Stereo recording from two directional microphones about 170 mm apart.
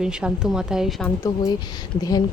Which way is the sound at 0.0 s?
5° right (ahead or behind).